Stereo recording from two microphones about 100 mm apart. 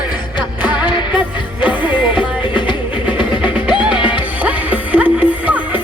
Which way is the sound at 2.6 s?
50° left (ahead or behind).